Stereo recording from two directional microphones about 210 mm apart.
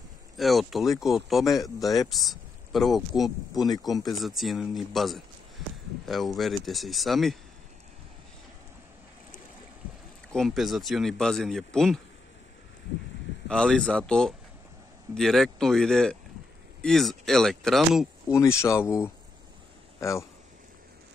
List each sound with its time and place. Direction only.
0.4 s speech: centre (ahead or behind)
3.5 s speech: 20° left (ahead or behind)
4.0 s speech: centre (ahead or behind)
10.3 s speech: centre (ahead or behind)
13.5 s speech: 5° left (ahead or behind)
18.3 s speech: 15° left (ahead or behind)